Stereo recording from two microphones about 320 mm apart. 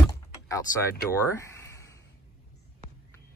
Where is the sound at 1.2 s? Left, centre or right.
Centre.